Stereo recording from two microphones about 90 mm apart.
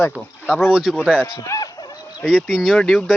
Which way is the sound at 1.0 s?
10° left (ahead or behind).